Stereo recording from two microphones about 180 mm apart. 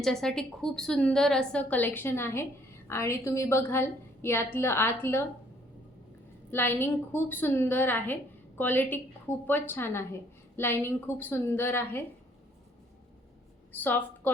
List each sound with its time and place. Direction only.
0.0 s a woman's voice: centre (ahead or behind)
6.5 s a woman's voice: 10° left (ahead or behind)
13.7 s a woman's voice: 10° left (ahead or behind)